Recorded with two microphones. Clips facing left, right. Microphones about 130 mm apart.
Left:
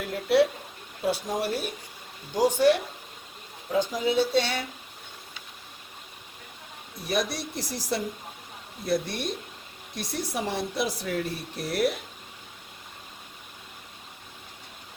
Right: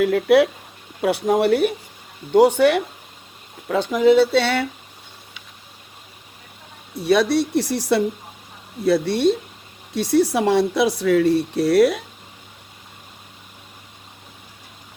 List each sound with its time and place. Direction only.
0.0 s speech: 80° right
1.0 s speech: 65° right (ahead or behind)
6.9 s speech: 75° right (ahead or behind)